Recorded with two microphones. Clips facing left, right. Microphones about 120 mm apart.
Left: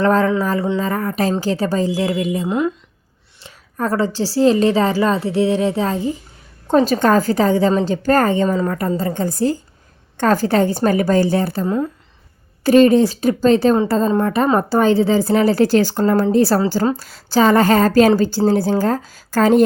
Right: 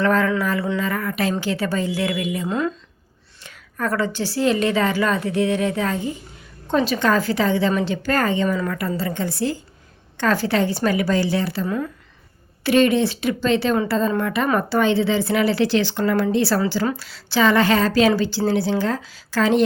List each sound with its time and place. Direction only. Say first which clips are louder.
0.0 s a woman's voice: left 4 dB; 35° left (ahead or behind)
2.5 s speech: left 3 dB; 15° left (ahead or behind)
3.4 s a woman's voice: left 3 dB; 30° left (ahead or behind)
6.7 s a woman's voice: left 5 dB; 40° left (ahead or behind)
8.4 s a woman's voice: left 4 dB; 30° left (ahead or behind)